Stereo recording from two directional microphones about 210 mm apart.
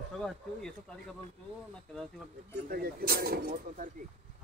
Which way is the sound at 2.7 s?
45° right (ahead or behind).